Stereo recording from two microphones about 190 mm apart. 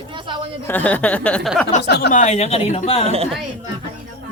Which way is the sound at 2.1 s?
35° left (ahead or behind).